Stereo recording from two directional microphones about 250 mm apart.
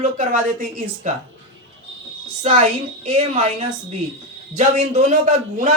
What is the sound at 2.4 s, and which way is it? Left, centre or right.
A man's voice, right.